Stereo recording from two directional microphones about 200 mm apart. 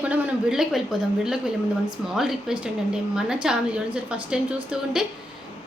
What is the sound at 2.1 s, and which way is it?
A woman's voice, centre (ahead or behind).